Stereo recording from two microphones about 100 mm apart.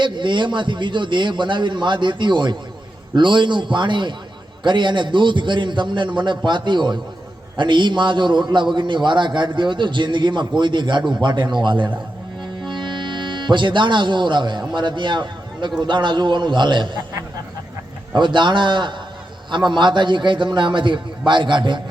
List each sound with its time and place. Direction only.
0.0 s a man's voice: 50° right (ahead or behind)
12.4 s music: 50° right (ahead or behind)
14.8 s a man's voice: 50° right (ahead or behind)
18.1 s a man's voice: 50° right (ahead or behind)